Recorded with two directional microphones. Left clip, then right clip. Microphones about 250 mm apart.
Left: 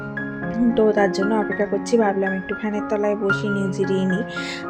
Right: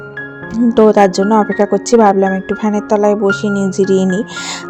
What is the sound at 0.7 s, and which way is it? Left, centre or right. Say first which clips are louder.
A woman's voice: right 10 dB; right.